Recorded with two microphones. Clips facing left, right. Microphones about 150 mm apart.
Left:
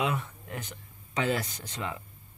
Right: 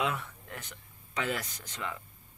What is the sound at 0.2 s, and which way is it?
Speech, 20° left (ahead or behind).